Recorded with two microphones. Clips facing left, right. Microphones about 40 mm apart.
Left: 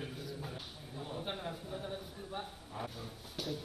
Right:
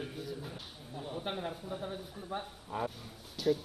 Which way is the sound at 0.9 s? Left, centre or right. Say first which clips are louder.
Right 3 dB; centre.